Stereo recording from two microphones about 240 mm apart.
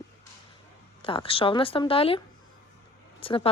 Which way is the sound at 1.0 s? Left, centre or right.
Left.